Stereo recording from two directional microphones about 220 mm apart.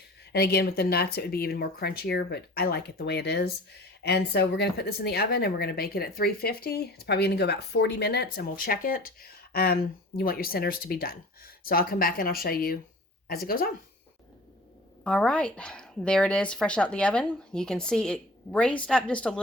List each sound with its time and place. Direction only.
0.3 s speech: 45° left (ahead or behind)
15.0 s speech: 5° left (ahead or behind)